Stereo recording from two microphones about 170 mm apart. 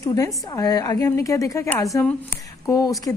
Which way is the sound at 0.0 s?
20° left (ahead or behind).